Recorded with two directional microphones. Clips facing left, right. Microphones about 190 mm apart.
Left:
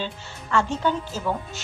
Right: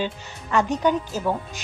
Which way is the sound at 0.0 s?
15° right (ahead or behind).